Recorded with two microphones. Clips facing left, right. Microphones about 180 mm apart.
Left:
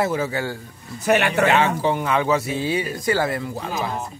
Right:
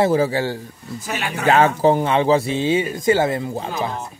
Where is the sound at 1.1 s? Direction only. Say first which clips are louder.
Left 9 dB; 65° left (ahead or behind).